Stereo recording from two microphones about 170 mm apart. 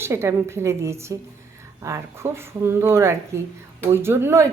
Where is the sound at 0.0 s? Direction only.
15° right (ahead or behind).